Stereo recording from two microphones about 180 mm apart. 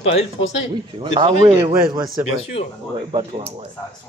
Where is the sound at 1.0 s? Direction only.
30° right (ahead or behind).